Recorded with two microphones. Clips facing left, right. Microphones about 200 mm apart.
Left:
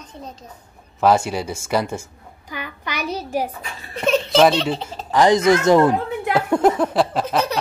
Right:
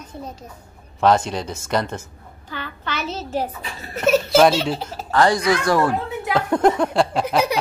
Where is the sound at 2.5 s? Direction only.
15° left (ahead or behind).